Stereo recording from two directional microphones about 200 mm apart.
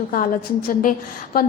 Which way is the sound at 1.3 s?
50° left (ahead or behind).